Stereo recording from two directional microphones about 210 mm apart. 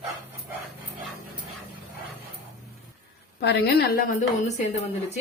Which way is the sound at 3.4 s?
50° left (ahead or behind).